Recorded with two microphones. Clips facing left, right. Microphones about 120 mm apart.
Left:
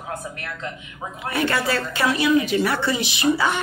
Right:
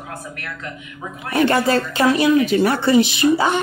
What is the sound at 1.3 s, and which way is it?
Speech, 45° right (ahead or behind).